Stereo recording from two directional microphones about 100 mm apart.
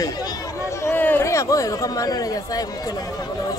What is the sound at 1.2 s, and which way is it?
Speech, 30° left (ahead or behind).